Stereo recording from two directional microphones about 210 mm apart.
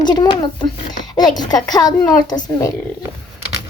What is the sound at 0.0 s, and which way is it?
Speech, 20° left (ahead or behind).